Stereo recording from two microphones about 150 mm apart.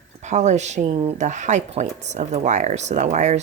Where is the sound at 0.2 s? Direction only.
50° right (ahead or behind).